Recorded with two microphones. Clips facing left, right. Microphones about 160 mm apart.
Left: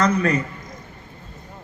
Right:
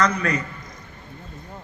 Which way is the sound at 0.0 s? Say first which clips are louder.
Left 3 dB; 30° left (ahead or behind).